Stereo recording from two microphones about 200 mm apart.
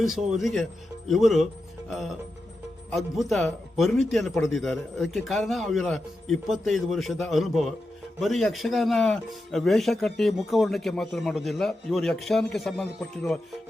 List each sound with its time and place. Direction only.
0.1 s speech: centre (ahead or behind)